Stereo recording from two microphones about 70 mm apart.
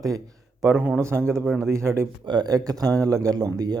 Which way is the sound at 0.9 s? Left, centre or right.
Right.